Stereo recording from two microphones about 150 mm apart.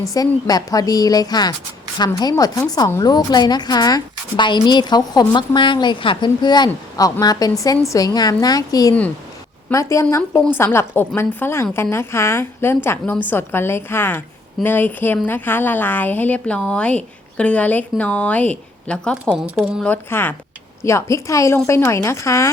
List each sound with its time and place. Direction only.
0.1 s a woman's voice: 25° left (ahead or behind); by 19.1 s 10° left (ahead or behind)
19.4 s speech: 5° right (ahead or behind)
19.8 s a woman's voice: 10° left (ahead or behind)